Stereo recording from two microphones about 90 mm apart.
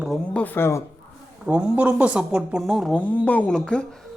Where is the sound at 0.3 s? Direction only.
20° left (ahead or behind).